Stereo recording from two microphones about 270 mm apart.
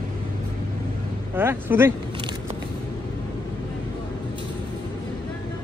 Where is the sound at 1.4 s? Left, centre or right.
Centre.